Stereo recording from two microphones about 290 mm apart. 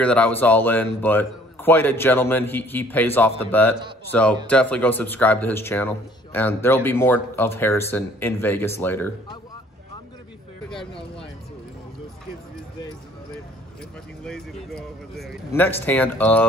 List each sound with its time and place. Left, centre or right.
0.0 s speech: centre
10.9 s speech: centre
14.2 s speech: centre